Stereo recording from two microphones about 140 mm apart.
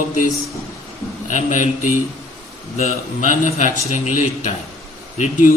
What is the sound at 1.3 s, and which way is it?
Speech, 60° left (ahead or behind).